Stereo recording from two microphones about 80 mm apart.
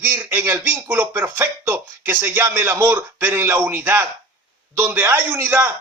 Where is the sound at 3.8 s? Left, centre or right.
Right.